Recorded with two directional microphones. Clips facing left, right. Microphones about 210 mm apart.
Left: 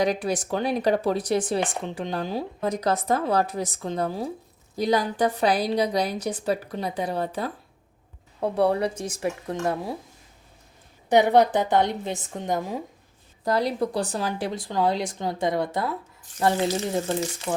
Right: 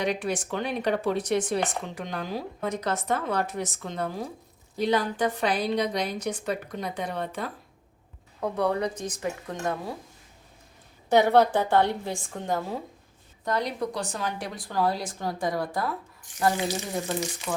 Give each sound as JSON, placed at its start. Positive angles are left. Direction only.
{"t": 0.0, "sound": "a woman's voice", "side_deg": 40}
{"t": 11.1, "sound": "a woman's voice", "side_deg": 15}
{"t": 13.4, "sound": "a woman's voice", "side_deg": 35}